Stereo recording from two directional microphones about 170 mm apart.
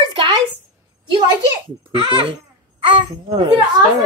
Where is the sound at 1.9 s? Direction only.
30° right (ahead or behind).